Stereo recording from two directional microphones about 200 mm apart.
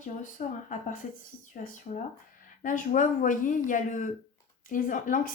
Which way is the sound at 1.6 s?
40° left (ahead or behind).